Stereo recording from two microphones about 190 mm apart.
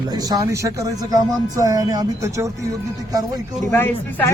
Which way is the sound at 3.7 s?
10° left (ahead or behind).